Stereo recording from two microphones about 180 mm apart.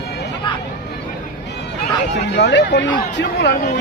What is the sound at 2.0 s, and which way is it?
Speech, 75° left (ahead or behind).